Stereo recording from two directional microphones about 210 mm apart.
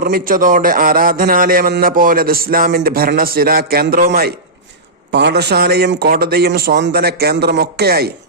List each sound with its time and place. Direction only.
0.0 s a man's voice: 45° right (ahead or behind)